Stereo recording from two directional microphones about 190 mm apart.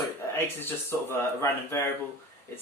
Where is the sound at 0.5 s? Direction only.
10° left (ahead or behind).